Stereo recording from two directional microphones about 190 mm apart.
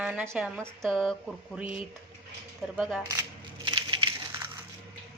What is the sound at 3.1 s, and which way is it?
Crushing, 20° right (ahead or behind).